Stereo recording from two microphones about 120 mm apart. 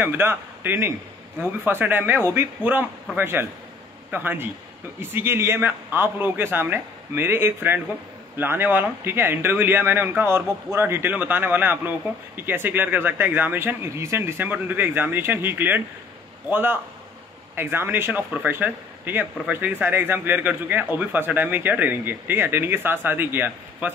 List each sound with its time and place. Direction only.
0.0 s a man's voice: 15° right (ahead or behind)